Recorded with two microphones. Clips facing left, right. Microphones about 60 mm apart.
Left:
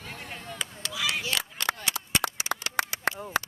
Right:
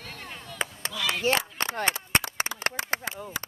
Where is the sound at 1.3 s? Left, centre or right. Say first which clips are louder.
Right 4 dB; right.